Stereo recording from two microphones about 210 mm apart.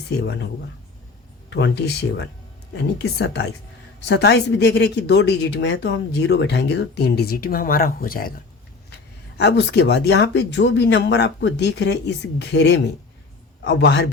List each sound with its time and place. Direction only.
0.2 s speech: 55° left (ahead or behind)
1.5 s speech: 55° left (ahead or behind)
9.4 s speech: 55° left (ahead or behind)